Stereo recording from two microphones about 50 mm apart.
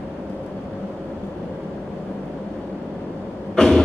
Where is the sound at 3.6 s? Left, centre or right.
Centre.